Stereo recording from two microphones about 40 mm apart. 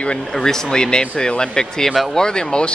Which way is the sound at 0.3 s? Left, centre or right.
Centre.